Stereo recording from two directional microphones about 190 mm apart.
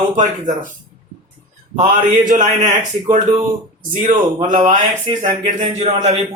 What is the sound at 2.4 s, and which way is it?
Speech, 40° right (ahead or behind).